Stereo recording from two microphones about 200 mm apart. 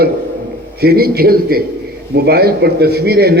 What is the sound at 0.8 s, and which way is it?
A man's voice, 50° right (ahead or behind).